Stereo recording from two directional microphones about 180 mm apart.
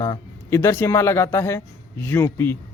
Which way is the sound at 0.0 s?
15° left (ahead or behind).